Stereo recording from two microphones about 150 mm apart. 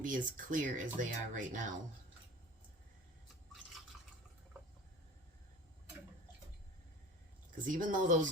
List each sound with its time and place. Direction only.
0.0 s speech: 60° right (ahead or behind)
7.7 s speech: 60° right (ahead or behind)